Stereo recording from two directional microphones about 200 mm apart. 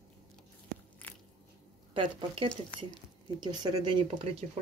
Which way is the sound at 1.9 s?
25° right (ahead or behind).